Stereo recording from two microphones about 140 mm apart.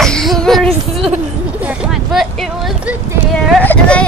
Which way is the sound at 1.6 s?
Centre (ahead or behind).